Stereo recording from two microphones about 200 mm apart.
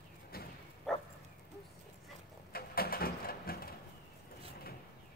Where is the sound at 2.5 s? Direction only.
50° left (ahead or behind).